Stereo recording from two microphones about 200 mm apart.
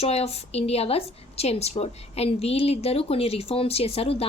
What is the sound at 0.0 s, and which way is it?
A woman's voice, 30° left (ahead or behind).